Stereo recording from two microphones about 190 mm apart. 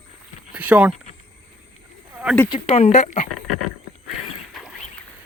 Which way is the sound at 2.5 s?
30° left (ahead or behind).